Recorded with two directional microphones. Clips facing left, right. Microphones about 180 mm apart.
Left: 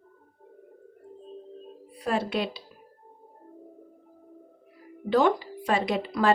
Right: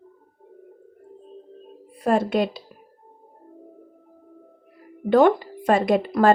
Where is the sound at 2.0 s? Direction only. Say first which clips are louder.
Right 7 dB; 50° right (ahead or behind).